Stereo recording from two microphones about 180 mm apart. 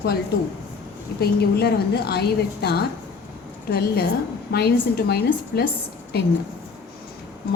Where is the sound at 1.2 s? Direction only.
60° left (ahead or behind).